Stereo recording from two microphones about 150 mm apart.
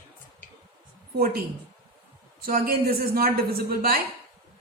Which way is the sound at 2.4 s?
70° right (ahead or behind).